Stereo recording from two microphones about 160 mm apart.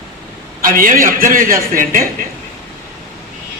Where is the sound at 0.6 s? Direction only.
60° right (ahead or behind).